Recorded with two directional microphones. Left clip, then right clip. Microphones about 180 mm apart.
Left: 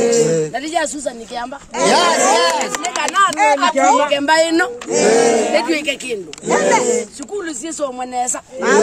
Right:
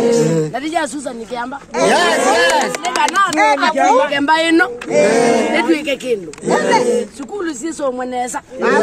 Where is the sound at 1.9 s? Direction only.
20° right (ahead or behind).